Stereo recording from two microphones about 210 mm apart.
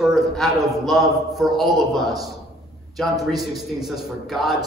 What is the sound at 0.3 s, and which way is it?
A man's voice, centre (ahead or behind).